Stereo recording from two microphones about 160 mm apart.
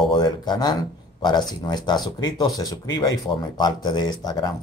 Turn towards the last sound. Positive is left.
turn(degrees=25)  # may be behind; listen again after turning